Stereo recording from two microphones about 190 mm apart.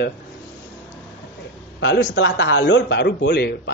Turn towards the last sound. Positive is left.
turn(degrees=65)  # may be behind; listen again after turning